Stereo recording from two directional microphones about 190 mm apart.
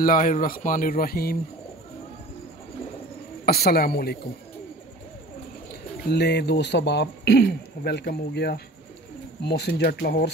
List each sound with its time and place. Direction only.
0.0 s speech: 45° left (ahead or behind)
3.4 s speech: 55° left (ahead or behind)
6.0 s speech: 60° left (ahead or behind)